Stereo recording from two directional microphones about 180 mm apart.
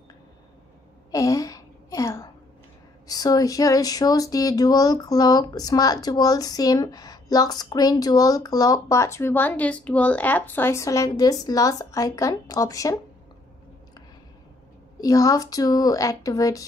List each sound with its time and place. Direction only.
1.1 s a sound: 20° left (ahead or behind)
3.1 s speech: 20° left (ahead or behind)
15.0 s speech: 20° left (ahead or behind)